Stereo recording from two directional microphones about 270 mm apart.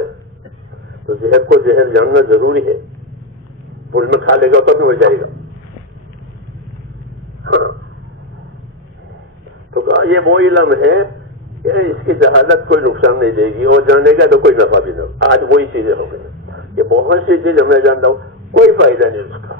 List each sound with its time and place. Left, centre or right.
1.2 s a man's voice: right
3.9 s a man's voice: right
7.4 s a sound: right
9.8 s a man's voice: right